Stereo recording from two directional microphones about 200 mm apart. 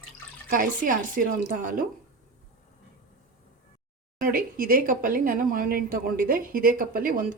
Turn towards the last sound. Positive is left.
turn(degrees=-45)  # may be behind; listen again after turning